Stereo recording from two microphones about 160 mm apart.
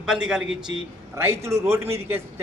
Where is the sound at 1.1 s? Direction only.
15° right (ahead or behind).